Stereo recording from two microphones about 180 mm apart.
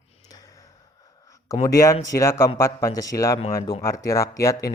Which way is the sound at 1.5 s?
15° left (ahead or behind).